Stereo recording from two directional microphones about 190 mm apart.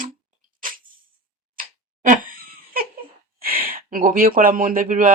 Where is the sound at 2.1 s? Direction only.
50° right (ahead or behind).